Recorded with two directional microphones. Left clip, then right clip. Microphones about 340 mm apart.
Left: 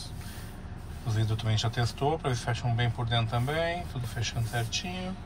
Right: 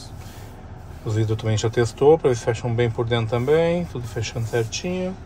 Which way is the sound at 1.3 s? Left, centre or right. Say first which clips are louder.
Right 6 dB; centre.